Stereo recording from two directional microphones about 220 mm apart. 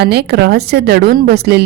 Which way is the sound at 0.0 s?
50° right (ahead or behind).